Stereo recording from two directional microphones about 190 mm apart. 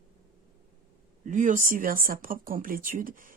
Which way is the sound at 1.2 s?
40° right (ahead or behind).